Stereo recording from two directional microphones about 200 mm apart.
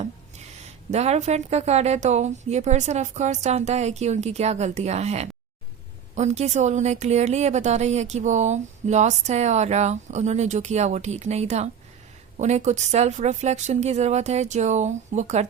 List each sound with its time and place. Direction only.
0.9 s a woman's voice: 35° right (ahead or behind)